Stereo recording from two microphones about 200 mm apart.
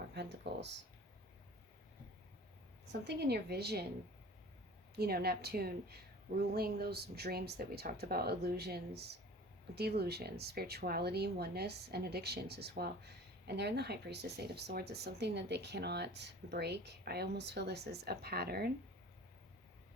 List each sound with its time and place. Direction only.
0.1 s speech: 55° right (ahead or behind)
3.0 s speech: 55° right (ahead or behind)
4.9 s a woman's voice: 50° right (ahead or behind)